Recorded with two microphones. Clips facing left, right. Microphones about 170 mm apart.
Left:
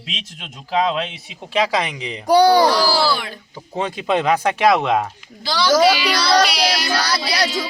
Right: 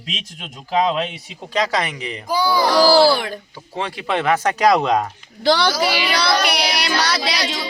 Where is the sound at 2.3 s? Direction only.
75° left (ahead or behind).